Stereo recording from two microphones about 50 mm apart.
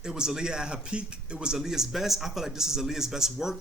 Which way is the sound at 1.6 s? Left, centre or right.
Centre.